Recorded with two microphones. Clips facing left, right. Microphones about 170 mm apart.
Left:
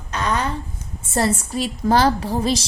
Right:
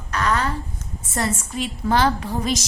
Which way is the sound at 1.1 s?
35° left (ahead or behind).